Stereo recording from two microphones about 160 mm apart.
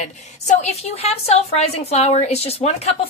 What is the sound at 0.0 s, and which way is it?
A woman's voice, 45° left (ahead or behind).